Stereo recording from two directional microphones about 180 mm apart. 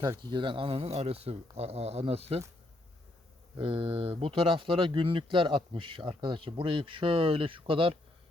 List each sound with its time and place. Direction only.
0.2 s speech: 25° right (ahead or behind)
3.6 s speech: 30° right (ahead or behind)